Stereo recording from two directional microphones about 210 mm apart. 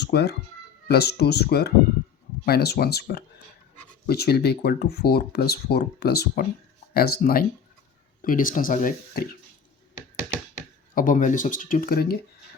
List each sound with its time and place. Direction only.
0.0 s speech: 50° left (ahead or behind)
10.9 s speech: 40° left (ahead or behind)